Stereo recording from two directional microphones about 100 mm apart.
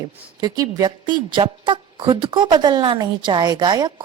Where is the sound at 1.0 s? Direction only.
50° right (ahead or behind).